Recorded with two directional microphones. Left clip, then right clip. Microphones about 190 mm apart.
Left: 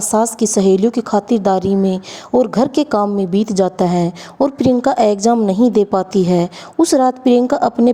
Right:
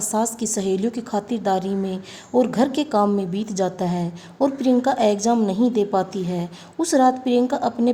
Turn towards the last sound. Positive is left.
turn(degrees=35)  # may be behind; listen again after turning